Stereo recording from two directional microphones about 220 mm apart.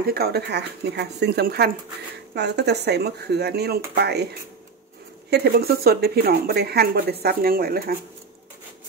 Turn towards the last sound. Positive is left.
turn(degrees=-45)  # may be behind; listen again after turning